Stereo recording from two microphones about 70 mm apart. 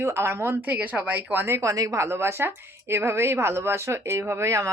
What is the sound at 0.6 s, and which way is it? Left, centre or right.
Speech, right.